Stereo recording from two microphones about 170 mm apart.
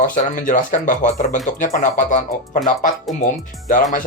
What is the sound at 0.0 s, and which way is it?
Speech, 50° left (ahead or behind).